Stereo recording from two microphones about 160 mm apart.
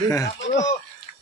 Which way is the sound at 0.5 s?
50° left (ahead or behind).